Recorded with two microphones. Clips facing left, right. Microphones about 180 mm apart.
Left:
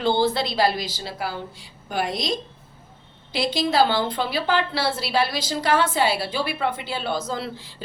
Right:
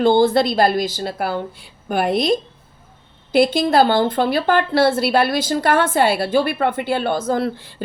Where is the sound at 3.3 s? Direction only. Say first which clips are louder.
Right 6 dB; 55° right (ahead or behind).